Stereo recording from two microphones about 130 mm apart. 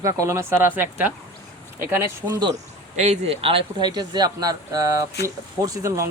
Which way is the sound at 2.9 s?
60° right (ahead or behind).